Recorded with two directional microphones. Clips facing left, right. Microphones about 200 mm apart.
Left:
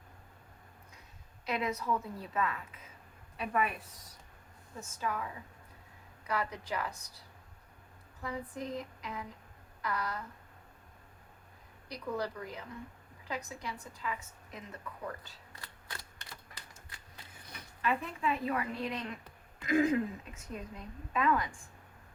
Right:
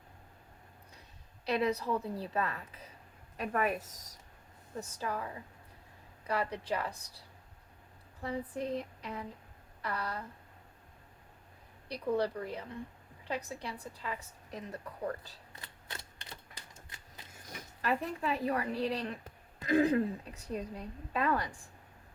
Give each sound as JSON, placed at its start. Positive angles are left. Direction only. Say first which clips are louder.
{"t": 1.5, "sound": "a woman's voice", "louder": "right 3 dB", "side_deg": -35}
{"t": 8.2, "sound": "a woman's voice", "louder": "right 3 dB", "side_deg": -30}
{"t": 11.9, "sound": "a woman's voice", "louder": "right 5 dB", "side_deg": -30}
{"t": 15.6, "sound": "typewriter", "louder": "even", "side_deg": -20}
{"t": 17.2, "sound": "speech", "louder": "right 5 dB", "side_deg": -45}